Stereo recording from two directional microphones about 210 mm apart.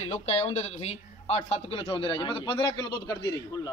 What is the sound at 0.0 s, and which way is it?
Speech, 30° left (ahead or behind).